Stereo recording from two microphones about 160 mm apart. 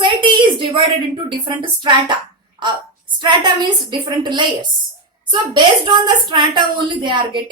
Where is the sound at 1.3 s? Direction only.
30° right (ahead or behind).